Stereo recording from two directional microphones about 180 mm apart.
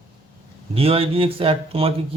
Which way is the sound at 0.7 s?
30° right (ahead or behind).